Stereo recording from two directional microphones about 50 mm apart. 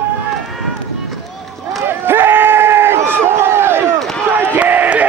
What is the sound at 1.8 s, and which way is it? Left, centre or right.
Crowd, right.